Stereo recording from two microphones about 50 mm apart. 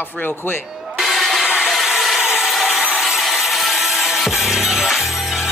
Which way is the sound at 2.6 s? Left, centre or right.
Centre.